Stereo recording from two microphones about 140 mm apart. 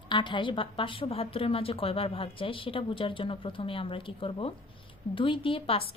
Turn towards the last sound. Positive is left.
turn(degrees=40)  # may be behind; listen again after turning